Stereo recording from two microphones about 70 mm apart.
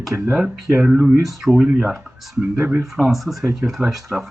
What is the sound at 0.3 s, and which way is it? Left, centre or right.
Speech, centre.